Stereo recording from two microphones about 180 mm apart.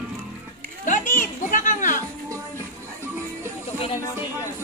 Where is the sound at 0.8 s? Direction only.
45° left (ahead or behind).